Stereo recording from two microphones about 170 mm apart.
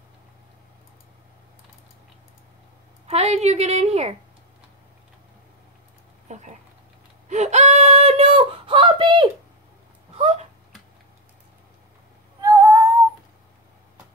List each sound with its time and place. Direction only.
3.1 s a woman's voice: 40° right (ahead or behind)
6.2 s a sound: 45° right (ahead or behind)
12.4 s female singing: 20° right (ahead or behind)